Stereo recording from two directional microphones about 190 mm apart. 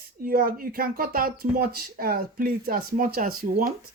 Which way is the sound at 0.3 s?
50° right (ahead or behind).